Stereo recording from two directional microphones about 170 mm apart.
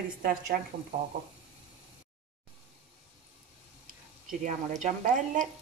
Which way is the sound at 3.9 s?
50° right (ahead or behind).